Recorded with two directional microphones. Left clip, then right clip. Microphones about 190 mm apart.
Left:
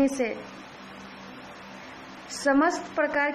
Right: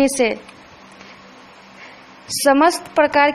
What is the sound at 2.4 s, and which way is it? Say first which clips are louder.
Speech: right 9 dB; 30° right (ahead or behind).